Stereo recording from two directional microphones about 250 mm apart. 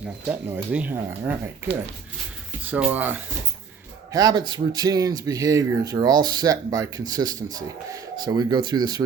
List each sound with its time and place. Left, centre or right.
0.3 s speech: centre